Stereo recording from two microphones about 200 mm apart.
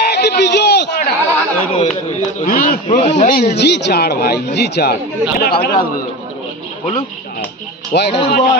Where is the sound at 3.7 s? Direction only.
55° left (ahead or behind).